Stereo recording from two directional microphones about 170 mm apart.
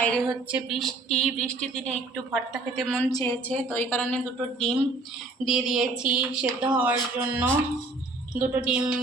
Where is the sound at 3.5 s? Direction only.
10° left (ahead or behind).